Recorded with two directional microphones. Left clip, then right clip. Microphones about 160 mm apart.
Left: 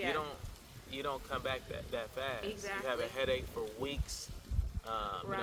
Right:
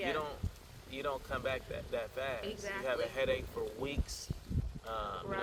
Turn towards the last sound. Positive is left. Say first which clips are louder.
# left 1 dB
turn(degrees=25)  # may be behind; listen again after turning